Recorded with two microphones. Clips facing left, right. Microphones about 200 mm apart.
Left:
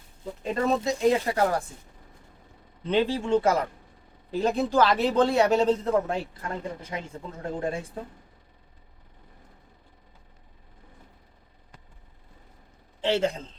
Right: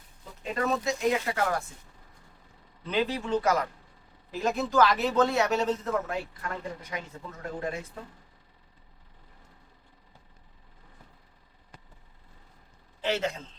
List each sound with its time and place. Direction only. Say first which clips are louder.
0.4 s speech: left 3 dB; 30° left (ahead or behind)
2.8 s speech: left 4 dB; 30° left (ahead or behind)
13.0 s a man's voice: left 5 dB; 30° left (ahead or behind)